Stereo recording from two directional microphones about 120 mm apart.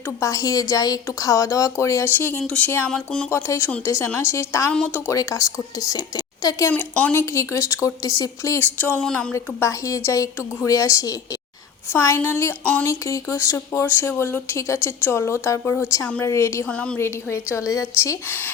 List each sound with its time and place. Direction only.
0.2 s speech: 30° left (ahead or behind)
2.9 s speech: 5° left (ahead or behind)
3.2 s speech: 25° left (ahead or behind)
4.7 s speech: 10° left (ahead or behind)
5.1 s speech: 30° left (ahead or behind)
6.7 s speech: 15° left (ahead or behind)
9.3 s speech: 25° left (ahead or behind)
16.6 s speech: 10° left (ahead or behind)
17.0 s speech: 20° left (ahead or behind)